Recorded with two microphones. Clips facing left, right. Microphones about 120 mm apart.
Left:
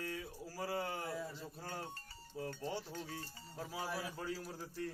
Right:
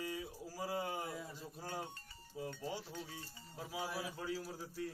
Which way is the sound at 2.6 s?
5° right (ahead or behind).